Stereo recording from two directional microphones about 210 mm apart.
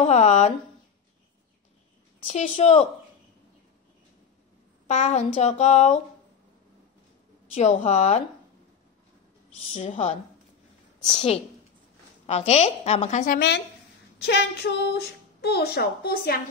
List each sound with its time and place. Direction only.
0.0 s a sound: 30° left (ahead or behind)
2.2 s a woman's voice: 30° left (ahead or behind)
4.8 s speech: 35° left (ahead or behind)
7.5 s speech: 30° left (ahead or behind)
9.8 s speech: 35° left (ahead or behind)
11.1 s a woman's voice: 30° left (ahead or behind)
14.1 s a woman's voice: 50° left (ahead or behind)